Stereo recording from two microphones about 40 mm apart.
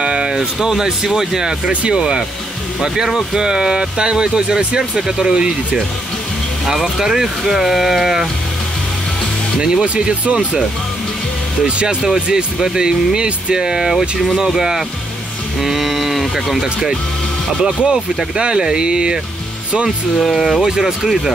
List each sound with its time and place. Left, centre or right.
0.0 s speech: right
1.7 s speech: right
2.0 s speech: right
6.6 s speech: centre
9.6 s speech: centre
11.6 s speech: right; by 16.6 s centre
17.8 s speech: centre
20.2 s speech: centre
20.6 s speech: centre